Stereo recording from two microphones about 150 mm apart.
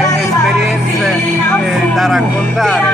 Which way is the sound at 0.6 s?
Centre (ahead or behind).